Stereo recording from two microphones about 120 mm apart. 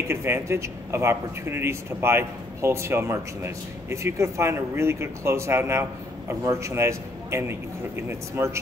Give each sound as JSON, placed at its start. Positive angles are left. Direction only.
{"t": 0.1, "sound": "a man's voice", "side_deg": -20}